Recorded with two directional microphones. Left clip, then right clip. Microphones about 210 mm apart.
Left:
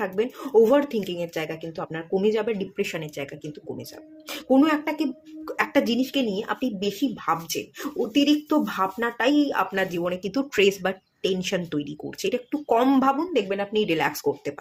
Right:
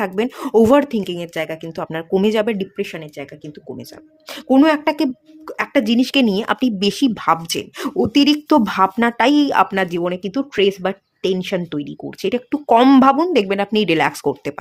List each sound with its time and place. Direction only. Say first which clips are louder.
0.0 s speech: right 5 dB; 40° right (ahead or behind)
2.7 s speech: right 2 dB; 20° right (ahead or behind)
4.3 s speech: right 6 dB; 35° right (ahead or behind)
5.5 s speech: right 4 dB; 25° right (ahead or behind)
12.5 s speech: right 10 dB; 40° right (ahead or behind)